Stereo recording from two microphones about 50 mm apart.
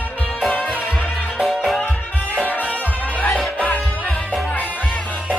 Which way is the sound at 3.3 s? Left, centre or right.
Left.